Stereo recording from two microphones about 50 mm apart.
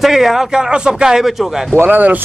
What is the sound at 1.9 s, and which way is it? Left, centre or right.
Speech, right.